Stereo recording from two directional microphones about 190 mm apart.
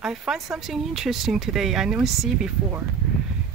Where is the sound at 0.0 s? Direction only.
Centre (ahead or behind).